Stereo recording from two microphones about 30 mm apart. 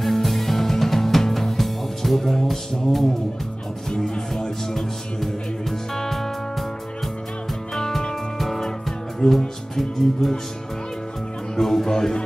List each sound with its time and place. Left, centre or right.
0.0 s music: centre
3.9 s music: left
4.4 s speech: centre
6.0 s music: centre
7.7 s music: centre
9.8 s speech: centre
11.5 s speech: centre